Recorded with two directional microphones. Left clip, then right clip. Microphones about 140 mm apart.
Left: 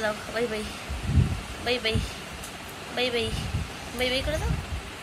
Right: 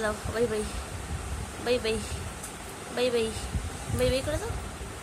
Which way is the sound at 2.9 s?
45° right (ahead or behind).